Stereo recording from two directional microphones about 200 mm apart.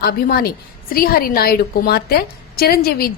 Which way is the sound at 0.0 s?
50° left (ahead or behind).